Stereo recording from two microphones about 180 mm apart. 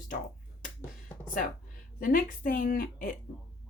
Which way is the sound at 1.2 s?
50° left (ahead or behind).